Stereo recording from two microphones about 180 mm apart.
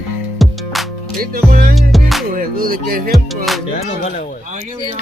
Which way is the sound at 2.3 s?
50° right (ahead or behind).